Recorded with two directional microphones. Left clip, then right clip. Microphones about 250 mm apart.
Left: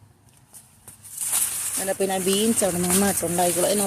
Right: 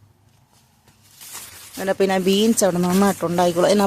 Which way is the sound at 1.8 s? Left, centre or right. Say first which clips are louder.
Right 6 dB; right.